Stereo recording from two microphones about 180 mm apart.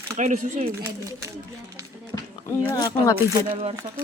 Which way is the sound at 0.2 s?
45° right (ahead or behind).